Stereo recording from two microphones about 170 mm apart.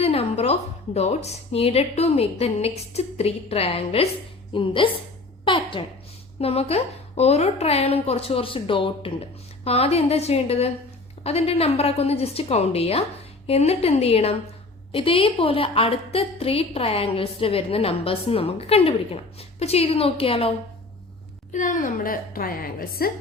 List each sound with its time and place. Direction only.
0.0 s a sound: 35° left (ahead or behind)
0.9 s a woman's voice: 40° left (ahead or behind)
21.5 s a woman's voice: 50° left (ahead or behind)